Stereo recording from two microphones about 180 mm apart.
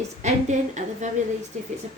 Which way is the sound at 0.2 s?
40° right (ahead or behind).